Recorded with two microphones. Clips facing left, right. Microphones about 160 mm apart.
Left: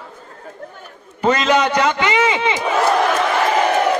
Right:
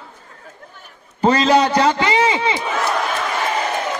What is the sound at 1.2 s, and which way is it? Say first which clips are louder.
A man's voice: right 2 dB; 35° right (ahead or behind).